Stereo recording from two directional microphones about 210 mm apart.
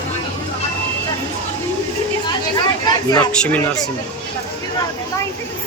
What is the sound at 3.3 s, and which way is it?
Speech, 5° left (ahead or behind).